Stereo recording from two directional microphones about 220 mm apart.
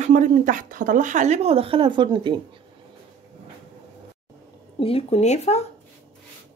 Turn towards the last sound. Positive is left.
turn(degrees=30)  # may be behind; listen again after turning